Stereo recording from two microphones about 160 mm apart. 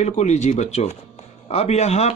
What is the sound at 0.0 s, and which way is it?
Speech, 45° left (ahead or behind).